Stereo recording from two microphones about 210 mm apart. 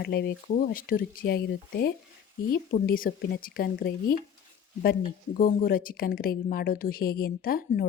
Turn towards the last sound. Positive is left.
turn(degrees=45)  # may be behind; listen again after turning